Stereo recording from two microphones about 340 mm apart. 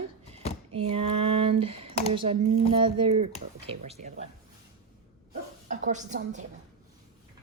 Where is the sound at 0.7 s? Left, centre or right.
Centre.